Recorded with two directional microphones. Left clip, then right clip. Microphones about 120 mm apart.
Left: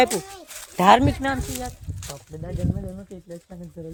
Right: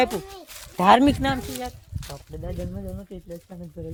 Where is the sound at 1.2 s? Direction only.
40° right (ahead or behind).